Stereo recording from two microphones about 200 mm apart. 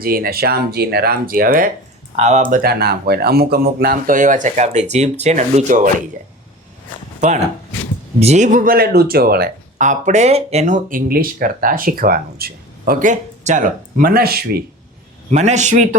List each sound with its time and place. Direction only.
0.0 s speech: 50° right (ahead or behind)
2.1 s speech: 35° right (ahead or behind)
2.6 s speech: 50° right (ahead or behind)
7.2 s speech: 35° right (ahead or behind)
15.3 s speech: 35° right (ahead or behind)